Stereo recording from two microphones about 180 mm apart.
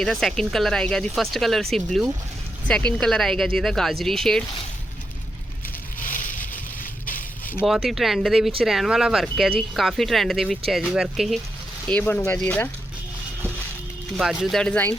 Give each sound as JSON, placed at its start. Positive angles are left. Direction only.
{"t": 0.0, "sound": "speech", "side_deg": 0}
{"t": 6.0, "sound": "crushing", "side_deg": 45}
{"t": 7.6, "sound": "speech", "side_deg": 0}
{"t": 11.9, "sound": "speech", "side_deg": 10}
{"t": 14.2, "sound": "speech", "side_deg": 0}